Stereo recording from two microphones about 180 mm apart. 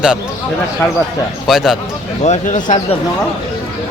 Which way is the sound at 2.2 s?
40° left (ahead or behind).